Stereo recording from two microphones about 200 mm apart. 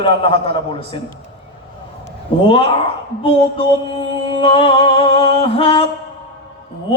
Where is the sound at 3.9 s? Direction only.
25° left (ahead or behind).